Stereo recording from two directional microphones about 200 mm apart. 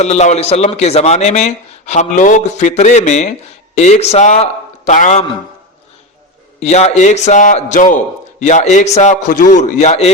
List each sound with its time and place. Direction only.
0.0 s speech: 35° left (ahead or behind)
6.6 s speech: 35° left (ahead or behind)